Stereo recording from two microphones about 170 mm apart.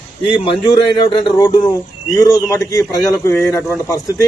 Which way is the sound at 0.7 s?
25° left (ahead or behind).